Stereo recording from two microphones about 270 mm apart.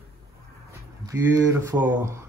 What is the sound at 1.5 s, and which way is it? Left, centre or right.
Speech, centre.